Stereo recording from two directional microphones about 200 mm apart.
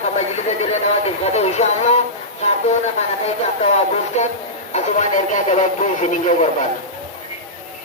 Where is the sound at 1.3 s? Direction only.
35° left (ahead or behind).